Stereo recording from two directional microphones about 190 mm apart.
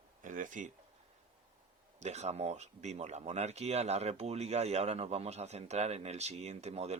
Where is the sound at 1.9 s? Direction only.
35° right (ahead or behind).